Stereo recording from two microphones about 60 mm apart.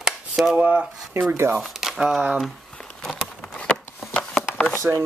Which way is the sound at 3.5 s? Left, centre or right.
Centre.